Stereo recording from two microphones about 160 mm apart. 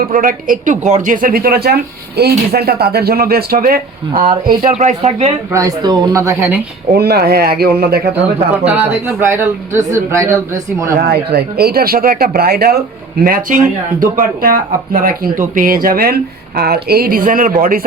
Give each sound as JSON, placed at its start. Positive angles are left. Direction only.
{"t": 0.0, "sound": "speech", "side_deg": -60}
{"t": 4.7, "sound": "speech", "side_deg": -45}
{"t": 5.5, "sound": "speech", "side_deg": -20}
{"t": 6.9, "sound": "speech", "side_deg": -80}
{"t": 8.6, "sound": "speech", "side_deg": -10}
{"t": 11.0, "sound": "speech", "side_deg": -80}
{"t": 13.2, "sound": "speech", "side_deg": -60}
{"t": 16.6, "sound": "speech", "side_deg": -80}